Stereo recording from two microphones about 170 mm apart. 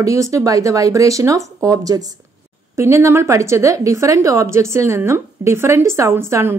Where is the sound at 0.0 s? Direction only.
20° right (ahead or behind).